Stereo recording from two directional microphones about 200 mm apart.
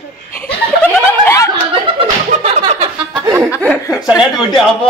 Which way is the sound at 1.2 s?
15° left (ahead or behind).